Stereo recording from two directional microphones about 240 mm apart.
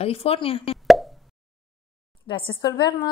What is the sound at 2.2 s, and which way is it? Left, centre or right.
Speech, centre.